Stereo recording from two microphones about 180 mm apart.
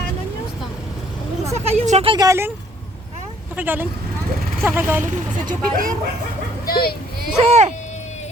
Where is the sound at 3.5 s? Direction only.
10° right (ahead or behind).